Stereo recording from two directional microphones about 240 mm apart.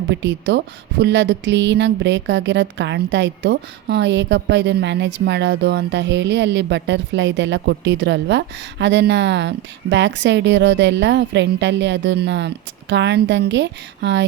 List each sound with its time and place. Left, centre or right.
0.1 s speech: right